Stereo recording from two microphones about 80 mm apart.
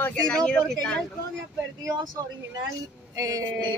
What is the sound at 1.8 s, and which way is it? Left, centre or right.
Speech, right.